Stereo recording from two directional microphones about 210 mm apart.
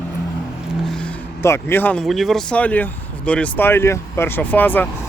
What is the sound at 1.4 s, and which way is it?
Speech, 10° left (ahead or behind).